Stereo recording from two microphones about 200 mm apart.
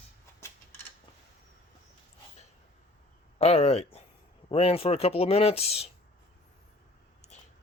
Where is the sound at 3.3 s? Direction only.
30° left (ahead or behind).